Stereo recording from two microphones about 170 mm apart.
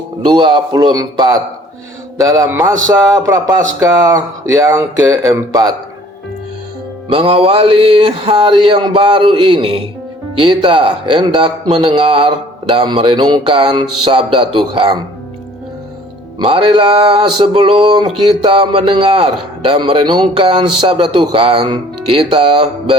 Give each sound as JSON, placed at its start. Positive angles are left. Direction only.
{"t": 0.3, "sound": "speech", "side_deg": -30}
{"t": 7.1, "sound": "a man's voice", "side_deg": -35}
{"t": 16.4, "sound": "a man's voice", "side_deg": -30}